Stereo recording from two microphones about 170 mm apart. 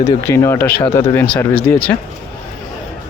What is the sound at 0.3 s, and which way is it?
Speech, 15° left (ahead or behind).